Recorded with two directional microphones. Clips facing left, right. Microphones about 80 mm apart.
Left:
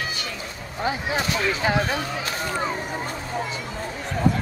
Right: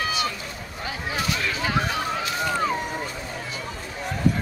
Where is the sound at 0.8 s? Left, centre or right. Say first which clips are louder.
Left 4 dB; left.